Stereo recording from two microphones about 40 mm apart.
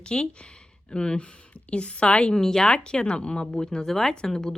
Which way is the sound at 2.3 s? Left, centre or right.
Centre.